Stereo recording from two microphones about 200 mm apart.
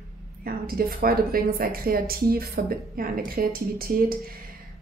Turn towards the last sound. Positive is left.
turn(degrees=-45)  # may be behind; listen again after turning